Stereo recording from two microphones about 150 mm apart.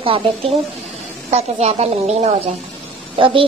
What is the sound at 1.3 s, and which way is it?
Speech, 45° right (ahead or behind).